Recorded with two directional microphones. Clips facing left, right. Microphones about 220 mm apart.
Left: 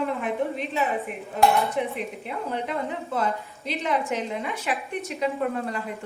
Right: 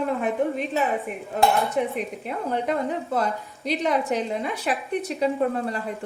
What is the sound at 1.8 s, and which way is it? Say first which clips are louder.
A woman's voice: right 3 dB; 45° right (ahead or behind).